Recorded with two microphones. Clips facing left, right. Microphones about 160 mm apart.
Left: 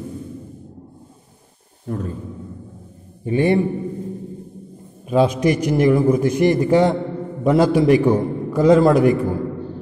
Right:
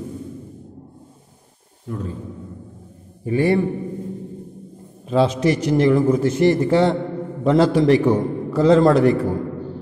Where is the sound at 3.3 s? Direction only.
20° left (ahead or behind).